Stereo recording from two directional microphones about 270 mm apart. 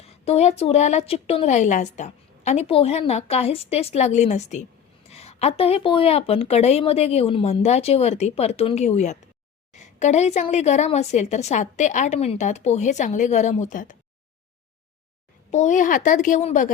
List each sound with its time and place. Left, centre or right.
0.0 s a woman's voice: left
15.4 s a woman's voice: left